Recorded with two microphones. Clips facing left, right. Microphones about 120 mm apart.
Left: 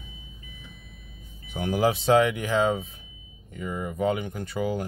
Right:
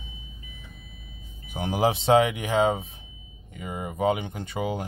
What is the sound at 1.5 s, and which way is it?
Speech, 20° right (ahead or behind).